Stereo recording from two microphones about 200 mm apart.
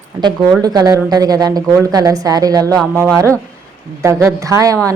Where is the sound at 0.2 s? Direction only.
20° right (ahead or behind).